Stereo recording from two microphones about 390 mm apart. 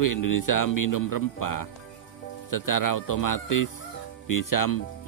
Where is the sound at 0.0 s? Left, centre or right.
Left.